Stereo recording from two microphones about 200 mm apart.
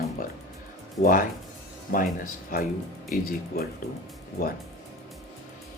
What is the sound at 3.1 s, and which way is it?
Speech, 45° left (ahead or behind).